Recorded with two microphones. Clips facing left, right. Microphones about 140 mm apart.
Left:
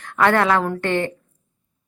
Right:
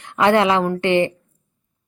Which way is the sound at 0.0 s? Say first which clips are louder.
Right 2 dB; 15° right (ahead or behind).